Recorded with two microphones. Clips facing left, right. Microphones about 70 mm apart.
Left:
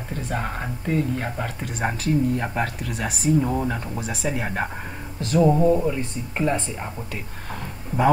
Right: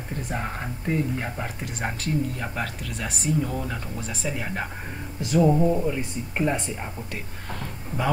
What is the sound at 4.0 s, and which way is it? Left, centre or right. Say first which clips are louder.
Speech: left 4 dB; left.